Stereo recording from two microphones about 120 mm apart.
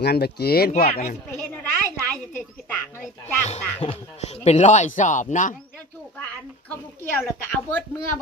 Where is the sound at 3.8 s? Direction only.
60° left (ahead or behind); by 5.5 s 90° left.